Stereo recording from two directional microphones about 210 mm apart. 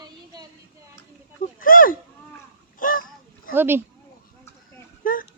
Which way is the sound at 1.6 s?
40° left (ahead or behind).